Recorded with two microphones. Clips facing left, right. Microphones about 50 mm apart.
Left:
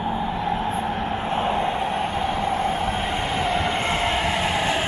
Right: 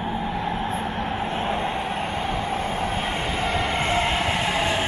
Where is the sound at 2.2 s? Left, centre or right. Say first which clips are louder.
Left 3 dB; left.